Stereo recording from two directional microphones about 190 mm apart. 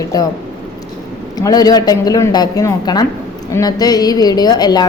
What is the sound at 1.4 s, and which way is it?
A woman's voice, 20° left (ahead or behind).